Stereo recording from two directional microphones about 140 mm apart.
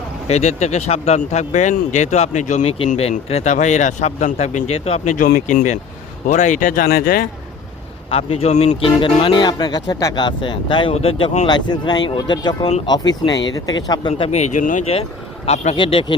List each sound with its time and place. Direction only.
0.3 s speech: 50° left (ahead or behind)
5.1 s speech: 75° left (ahead or behind); by 7.3 s 90° left
8.1 s speech: 50° left (ahead or behind)
11.4 s speech: 30° left (ahead or behind)
14.1 s speech: 50° left (ahead or behind)
15.4 s speech: 50° left (ahead or behind)
15.8 s speech: 35° left (ahead or behind)